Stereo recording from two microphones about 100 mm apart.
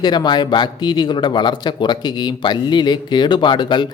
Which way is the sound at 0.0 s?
45° left (ahead or behind).